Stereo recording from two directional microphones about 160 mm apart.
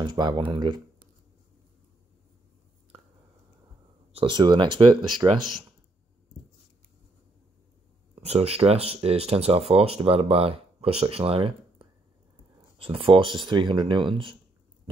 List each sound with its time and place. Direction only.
0.0 s speech: 25° right (ahead or behind)
4.1 s speech: 30° right (ahead or behind)
8.2 s speech: 40° right (ahead or behind)